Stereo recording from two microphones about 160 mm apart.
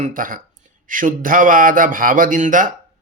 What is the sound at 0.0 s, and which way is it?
A man's voice, 55° right (ahead or behind).